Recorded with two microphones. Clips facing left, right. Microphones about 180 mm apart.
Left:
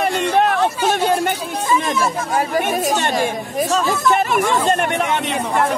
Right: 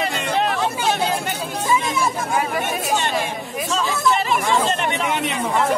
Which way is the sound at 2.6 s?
50° left (ahead or behind).